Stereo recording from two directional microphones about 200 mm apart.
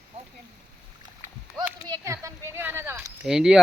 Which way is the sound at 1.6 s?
15° right (ahead or behind).